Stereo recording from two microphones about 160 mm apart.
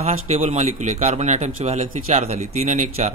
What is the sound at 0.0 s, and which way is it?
A man's voice, 40° right (ahead or behind).